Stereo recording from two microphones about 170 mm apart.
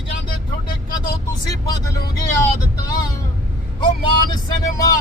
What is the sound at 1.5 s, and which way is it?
Speech, 20° left (ahead or behind).